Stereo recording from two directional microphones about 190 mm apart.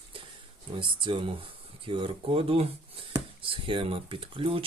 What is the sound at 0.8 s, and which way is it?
Speech, 25° right (ahead or behind).